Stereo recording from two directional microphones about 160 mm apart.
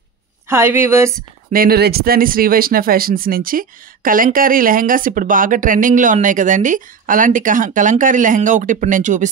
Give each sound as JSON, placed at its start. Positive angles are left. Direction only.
{"t": 0.5, "sound": "a woman's voice", "side_deg": -15}
{"t": 1.5, "sound": "speech", "side_deg": -70}